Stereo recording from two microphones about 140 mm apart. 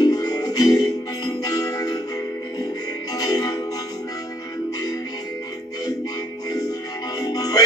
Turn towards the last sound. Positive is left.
turn(degrees=25)  # may be behind; listen again after turning